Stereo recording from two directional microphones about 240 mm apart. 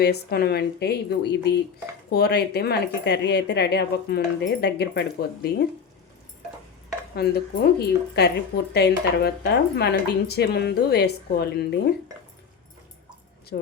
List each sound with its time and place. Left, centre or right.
0.0 s speech: left
7.2 s a woman's voice: left
13.5 s a woman's voice: left